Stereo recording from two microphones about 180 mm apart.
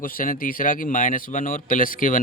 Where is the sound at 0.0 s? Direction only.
50° left (ahead or behind).